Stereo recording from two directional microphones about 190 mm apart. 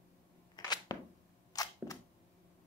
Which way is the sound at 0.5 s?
20° left (ahead or behind).